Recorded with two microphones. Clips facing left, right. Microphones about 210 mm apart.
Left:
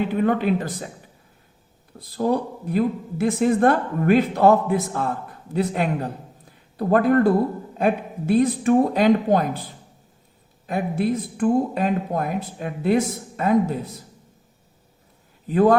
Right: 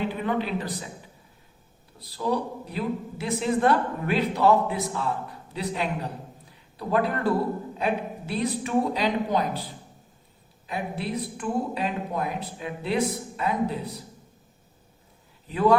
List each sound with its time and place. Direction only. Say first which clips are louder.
0.1 s speech: left 7 dB; 50° left (ahead or behind)
2.0 s speech: left 5 dB; 50° left (ahead or behind)
15.4 s speech: left 4 dB; 45° left (ahead or behind)